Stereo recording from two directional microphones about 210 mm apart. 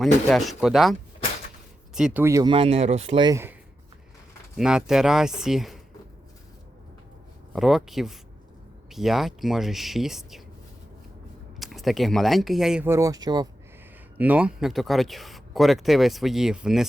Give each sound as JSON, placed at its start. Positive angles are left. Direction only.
{"t": 0.0, "sound": "speech", "side_deg": 0}
{"t": 2.0, "sound": "speech", "side_deg": -5}
{"t": 4.5, "sound": "speech", "side_deg": -5}
{"t": 7.5, "sound": "speech", "side_deg": 0}
{"t": 11.6, "sound": "speech", "side_deg": 0}
{"t": 14.2, "sound": "speech", "side_deg": -5}